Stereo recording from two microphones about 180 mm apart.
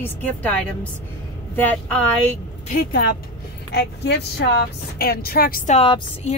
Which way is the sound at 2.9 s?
60° left (ahead or behind).